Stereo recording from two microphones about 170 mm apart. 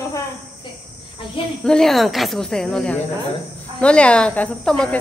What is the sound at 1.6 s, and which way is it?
Speech, 5° left (ahead or behind).